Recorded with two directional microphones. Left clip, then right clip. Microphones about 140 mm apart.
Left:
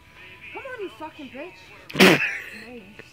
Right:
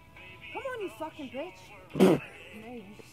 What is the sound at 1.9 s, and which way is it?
Speech, 20° left (ahead or behind).